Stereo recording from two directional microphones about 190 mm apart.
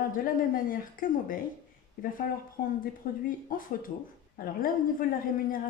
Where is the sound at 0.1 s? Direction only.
45° left (ahead or behind).